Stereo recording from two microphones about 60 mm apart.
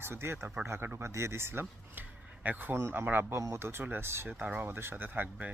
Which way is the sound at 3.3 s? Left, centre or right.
Right.